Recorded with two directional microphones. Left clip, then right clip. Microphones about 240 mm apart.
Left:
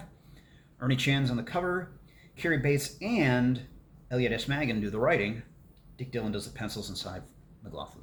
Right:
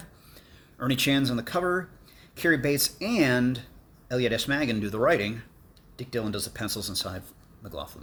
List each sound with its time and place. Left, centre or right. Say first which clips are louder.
0.8 s speech: right 4 dB; right